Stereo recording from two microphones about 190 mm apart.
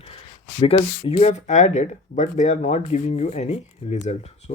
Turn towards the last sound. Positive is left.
turn(degrees=35)  # may be behind; listen again after turning